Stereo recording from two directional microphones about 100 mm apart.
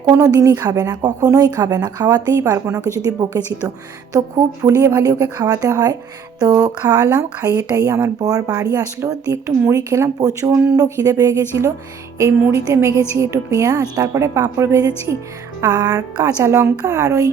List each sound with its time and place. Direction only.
0.1 s speech: 35° right (ahead or behind)